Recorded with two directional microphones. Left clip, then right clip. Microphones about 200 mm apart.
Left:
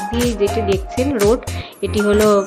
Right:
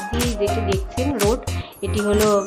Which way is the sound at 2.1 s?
15° left (ahead or behind).